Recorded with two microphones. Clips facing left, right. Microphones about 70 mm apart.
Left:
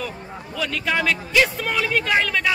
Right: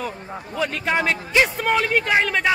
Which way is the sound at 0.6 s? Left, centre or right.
Right.